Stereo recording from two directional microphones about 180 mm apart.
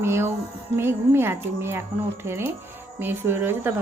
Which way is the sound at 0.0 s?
15° right (ahead or behind).